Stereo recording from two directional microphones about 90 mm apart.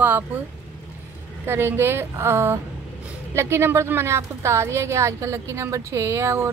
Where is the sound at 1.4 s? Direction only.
25° right (ahead or behind).